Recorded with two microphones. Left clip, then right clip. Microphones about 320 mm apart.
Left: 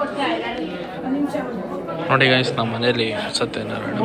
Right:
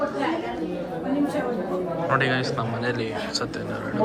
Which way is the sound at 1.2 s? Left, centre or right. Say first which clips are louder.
Left 1 dB; centre.